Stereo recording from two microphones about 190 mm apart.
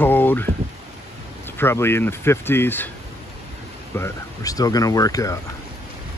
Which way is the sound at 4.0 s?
15° left (ahead or behind).